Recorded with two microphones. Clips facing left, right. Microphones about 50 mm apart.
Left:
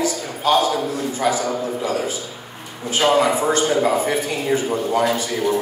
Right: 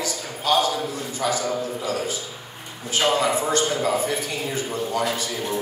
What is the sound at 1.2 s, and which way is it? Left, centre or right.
Speech, left.